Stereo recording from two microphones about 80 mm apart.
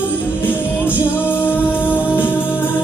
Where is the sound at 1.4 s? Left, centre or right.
Left.